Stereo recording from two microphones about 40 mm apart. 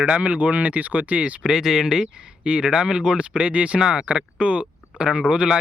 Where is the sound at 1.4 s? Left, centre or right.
Centre.